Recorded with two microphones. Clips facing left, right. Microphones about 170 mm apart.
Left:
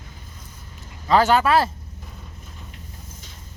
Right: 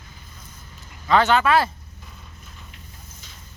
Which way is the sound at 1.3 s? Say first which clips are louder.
Left 1 dB; 35° left (ahead or behind).